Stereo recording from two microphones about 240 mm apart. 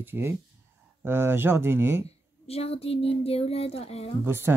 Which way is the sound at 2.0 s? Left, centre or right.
Left.